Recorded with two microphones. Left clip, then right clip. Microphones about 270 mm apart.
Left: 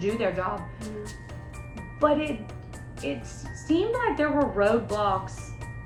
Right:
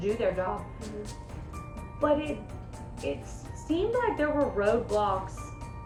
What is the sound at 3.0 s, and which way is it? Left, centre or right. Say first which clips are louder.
A woman's voice: left 1 dB; centre.